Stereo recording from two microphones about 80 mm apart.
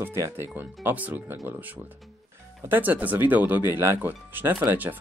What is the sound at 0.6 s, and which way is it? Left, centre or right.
Speech, right.